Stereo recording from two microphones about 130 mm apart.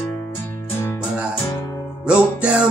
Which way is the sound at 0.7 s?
15° left (ahead or behind).